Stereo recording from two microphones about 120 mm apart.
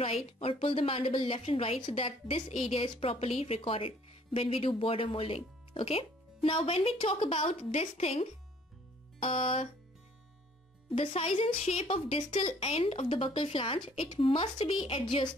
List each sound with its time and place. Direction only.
0.4 s a woman's voice: 50° left (ahead or behind)
11.0 s a woman's voice: 55° left (ahead or behind)